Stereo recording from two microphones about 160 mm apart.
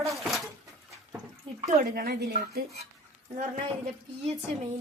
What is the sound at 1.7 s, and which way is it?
Speech, 55° right (ahead or behind).